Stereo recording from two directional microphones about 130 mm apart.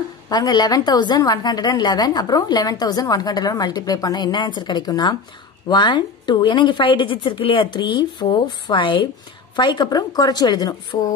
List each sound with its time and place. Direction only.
0.3 s a woman's voice: 30° left (ahead or behind)